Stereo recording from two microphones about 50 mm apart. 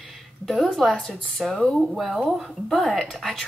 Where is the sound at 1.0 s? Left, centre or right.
Centre.